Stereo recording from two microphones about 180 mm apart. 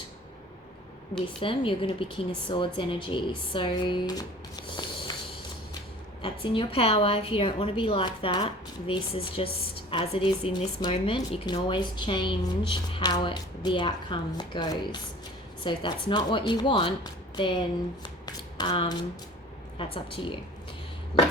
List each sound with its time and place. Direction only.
1.4 s a woman's voice: 30° left (ahead or behind)
6.2 s a woman's voice: 30° left (ahead or behind)
18.3 s shuffling cards: 25° left (ahead or behind)
19.8 s a woman's voice: 30° left (ahead or behind)